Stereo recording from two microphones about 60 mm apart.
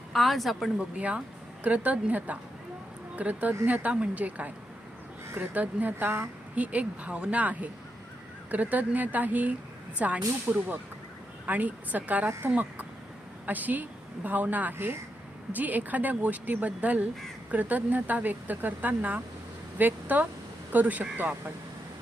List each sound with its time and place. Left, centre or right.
0.1 s a woman's voice: centre
0.8 s a woman's voice: centre